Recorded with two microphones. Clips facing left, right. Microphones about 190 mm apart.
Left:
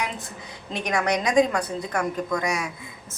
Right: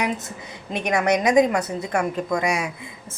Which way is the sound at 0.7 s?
20° right (ahead or behind).